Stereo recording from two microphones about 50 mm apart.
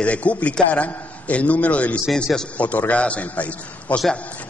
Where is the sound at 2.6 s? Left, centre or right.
Left.